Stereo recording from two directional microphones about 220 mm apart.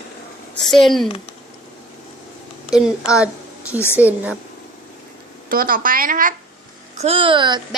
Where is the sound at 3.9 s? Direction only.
5° right (ahead or behind).